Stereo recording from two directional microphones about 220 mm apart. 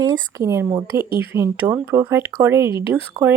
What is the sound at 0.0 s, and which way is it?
Speech, 15° right (ahead or behind).